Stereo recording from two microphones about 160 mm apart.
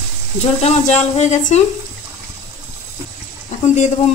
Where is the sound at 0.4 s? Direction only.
45° left (ahead or behind).